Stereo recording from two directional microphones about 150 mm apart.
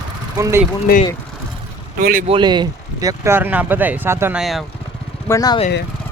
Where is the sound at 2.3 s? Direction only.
30° right (ahead or behind).